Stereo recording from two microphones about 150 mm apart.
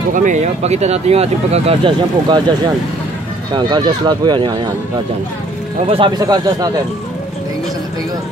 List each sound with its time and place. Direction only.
0.1 s speech: 55° right (ahead or behind); by 2.4 s 30° right (ahead or behind)
3.5 s speech: 30° right (ahead or behind)
5.9 s speech: 35° right (ahead or behind)